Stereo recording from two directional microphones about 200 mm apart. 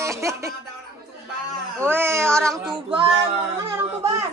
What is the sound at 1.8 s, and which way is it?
Speech, 10° right (ahead or behind).